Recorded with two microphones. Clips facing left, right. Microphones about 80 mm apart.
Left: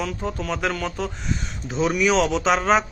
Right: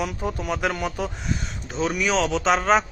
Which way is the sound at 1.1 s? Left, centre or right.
Centre.